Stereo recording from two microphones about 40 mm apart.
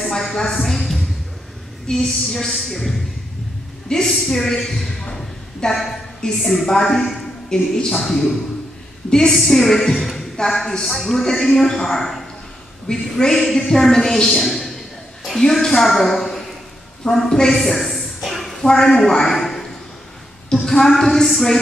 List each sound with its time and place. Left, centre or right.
0.1 s a woman's voice: centre
1.9 s a woman's voice: centre
2.2 s speech: centre
3.9 s a woman's voice: centre
4.3 s a woman's voice: centre
4.6 s a sound: centre
6.2 s a woman's voice: centre
9.9 s a sound: centre
10.3 s a woman's voice: centre
10.9 s speech: centre
11.4 s a woman's voice: centre
19.2 s a sound: centre
20.4 s a woman's voice: centre